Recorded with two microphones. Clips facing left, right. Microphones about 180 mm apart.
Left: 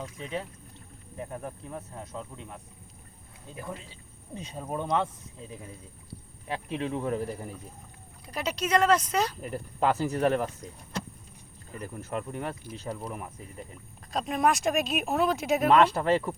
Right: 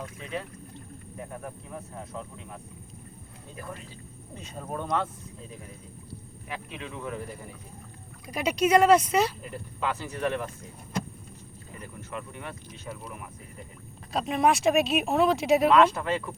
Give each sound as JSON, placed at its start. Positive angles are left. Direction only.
{"t": 3.5, "sound": "speech", "side_deg": 20}
{"t": 6.5, "sound": "speech", "side_deg": 35}
{"t": 8.3, "sound": "speech", "side_deg": -10}
{"t": 9.4, "sound": "speech", "side_deg": 40}
{"t": 11.8, "sound": "speech", "side_deg": 40}
{"t": 14.1, "sound": "speech", "side_deg": 0}
{"t": 15.7, "sound": "speech", "side_deg": 35}